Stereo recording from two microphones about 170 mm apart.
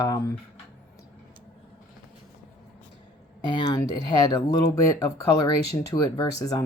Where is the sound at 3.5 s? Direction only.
25° left (ahead or behind).